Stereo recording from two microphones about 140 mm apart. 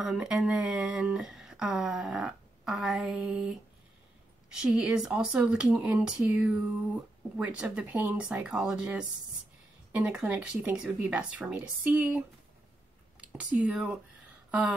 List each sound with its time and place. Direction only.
0.0 s speech: 5° right (ahead or behind)